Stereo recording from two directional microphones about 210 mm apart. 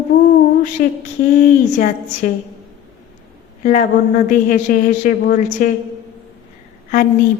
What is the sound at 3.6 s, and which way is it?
A woman's voice, 35° left (ahead or behind).